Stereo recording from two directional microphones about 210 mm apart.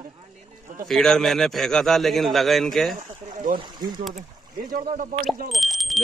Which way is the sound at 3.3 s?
35° right (ahead or behind).